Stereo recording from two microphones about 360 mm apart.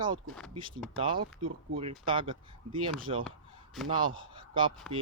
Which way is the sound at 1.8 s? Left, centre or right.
Centre.